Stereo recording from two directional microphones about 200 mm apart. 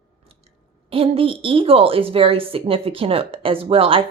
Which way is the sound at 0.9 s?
25° right (ahead or behind).